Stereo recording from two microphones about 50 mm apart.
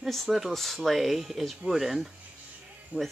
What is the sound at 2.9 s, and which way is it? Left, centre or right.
Speech, right.